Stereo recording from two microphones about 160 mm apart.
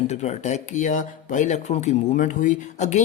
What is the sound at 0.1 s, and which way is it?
Speech, 45° left (ahead or behind).